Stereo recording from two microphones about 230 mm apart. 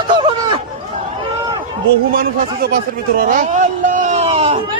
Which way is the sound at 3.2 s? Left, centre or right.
Right.